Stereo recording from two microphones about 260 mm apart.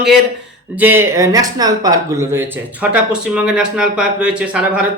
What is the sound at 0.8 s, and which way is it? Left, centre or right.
Speech, centre.